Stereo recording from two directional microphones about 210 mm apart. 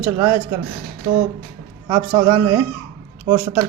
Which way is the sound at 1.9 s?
20° right (ahead or behind).